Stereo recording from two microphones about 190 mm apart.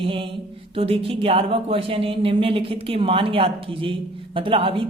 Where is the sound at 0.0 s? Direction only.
25° right (ahead or behind).